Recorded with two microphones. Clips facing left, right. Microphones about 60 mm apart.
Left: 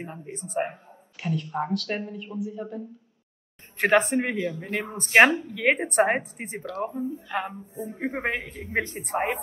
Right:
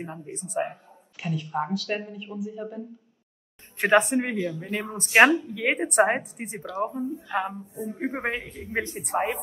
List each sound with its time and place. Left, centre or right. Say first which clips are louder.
0.0 s speech: right 1 dB; left
1.1 s a woman's voice: even; centre
3.8 s speech: even; left